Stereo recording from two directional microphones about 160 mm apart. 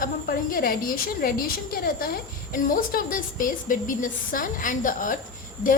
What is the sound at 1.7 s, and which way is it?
A woman's voice, 65° left (ahead or behind).